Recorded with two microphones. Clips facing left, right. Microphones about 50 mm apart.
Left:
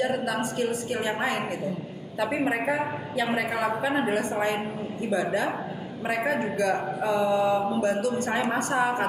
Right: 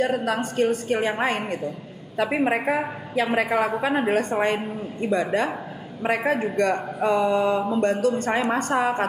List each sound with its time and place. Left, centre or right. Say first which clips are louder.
0.0 s a woman's voice: right 3 dB; right